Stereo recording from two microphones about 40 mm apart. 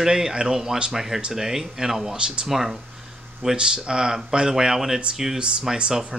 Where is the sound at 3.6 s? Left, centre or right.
Centre.